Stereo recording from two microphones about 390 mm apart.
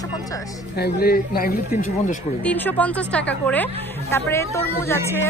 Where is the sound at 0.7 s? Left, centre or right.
Left.